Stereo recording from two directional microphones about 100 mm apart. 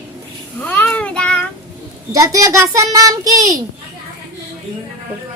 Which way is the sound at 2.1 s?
35° right (ahead or behind).